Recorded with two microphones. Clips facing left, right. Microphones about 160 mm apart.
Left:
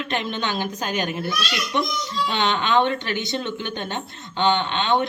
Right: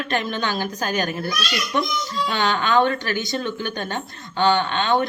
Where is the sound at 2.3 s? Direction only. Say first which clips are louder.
Right 1 dB; 25° left (ahead or behind).